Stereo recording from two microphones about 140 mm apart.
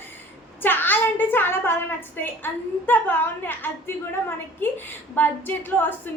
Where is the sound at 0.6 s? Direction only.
15° left (ahead or behind).